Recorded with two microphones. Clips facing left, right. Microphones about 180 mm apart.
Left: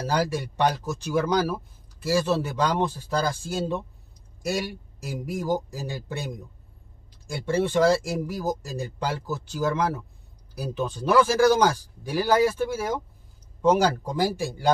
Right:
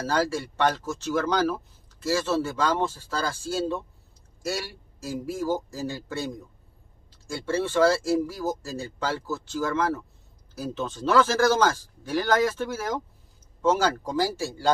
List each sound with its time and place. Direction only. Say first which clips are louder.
0.1 s speech: even; 15° left (ahead or behind)
7.2 s speech: left 2 dB; 15° left (ahead or behind)